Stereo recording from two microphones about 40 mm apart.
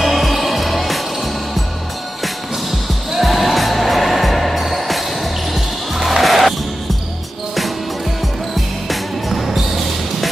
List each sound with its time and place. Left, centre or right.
0.0 s music: centre
3.1 s music: centre
8.5 s music: centre